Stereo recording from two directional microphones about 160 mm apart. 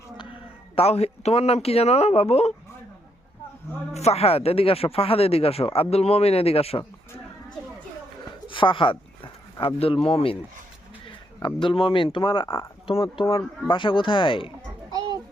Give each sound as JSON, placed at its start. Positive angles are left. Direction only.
{"t": 0.8, "sound": "speech", "side_deg": 40}
{"t": 3.9, "sound": "speech", "side_deg": 40}
{"t": 8.4, "sound": "speech", "side_deg": 30}
{"t": 11.4, "sound": "speech", "side_deg": 30}